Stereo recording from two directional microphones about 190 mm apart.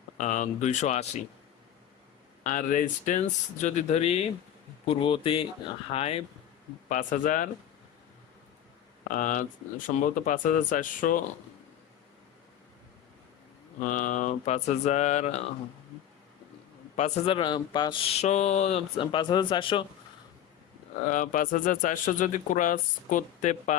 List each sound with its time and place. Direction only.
0.2 s speech: 40° left (ahead or behind)
2.4 s speech: 40° left (ahead or behind)
6.8 s speech: 45° left (ahead or behind)
9.1 s speech: 45° left (ahead or behind)
13.8 s speech: 45° left (ahead or behind)
17.0 s speech: 30° left (ahead or behind)
18.2 s speech: 40° left (ahead or behind)
19.1 s speech: 25° left (ahead or behind)
21.1 s speech: 45° left (ahead or behind)